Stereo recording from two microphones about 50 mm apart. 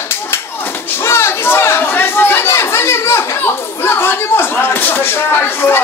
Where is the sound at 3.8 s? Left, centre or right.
Left.